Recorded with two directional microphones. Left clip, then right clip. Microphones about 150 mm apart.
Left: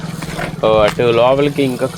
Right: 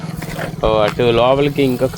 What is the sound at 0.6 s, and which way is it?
Speech, 45° right (ahead or behind).